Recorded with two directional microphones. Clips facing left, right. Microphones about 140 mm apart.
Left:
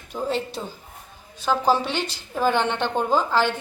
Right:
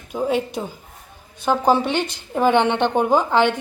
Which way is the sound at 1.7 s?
55° right (ahead or behind).